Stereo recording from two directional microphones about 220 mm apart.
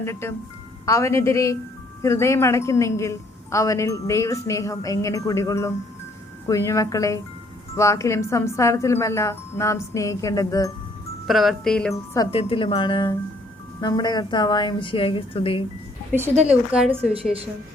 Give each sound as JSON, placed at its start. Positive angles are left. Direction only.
{"t": 0.0, "sound": "a woman's voice", "side_deg": 10}
{"t": 11.3, "sound": "speech", "side_deg": 0}
{"t": 12.1, "sound": "a woman's voice", "side_deg": 20}
{"t": 16.5, "sound": "speech", "side_deg": -5}